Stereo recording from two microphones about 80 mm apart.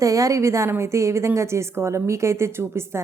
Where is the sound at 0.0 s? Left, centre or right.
Right.